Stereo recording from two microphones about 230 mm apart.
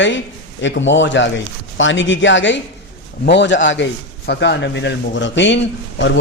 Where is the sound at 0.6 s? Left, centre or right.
Left.